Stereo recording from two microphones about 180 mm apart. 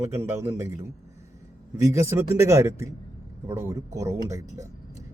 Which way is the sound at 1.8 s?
15° right (ahead or behind).